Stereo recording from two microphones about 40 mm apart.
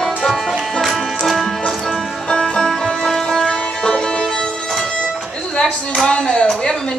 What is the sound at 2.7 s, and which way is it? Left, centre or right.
Music, centre.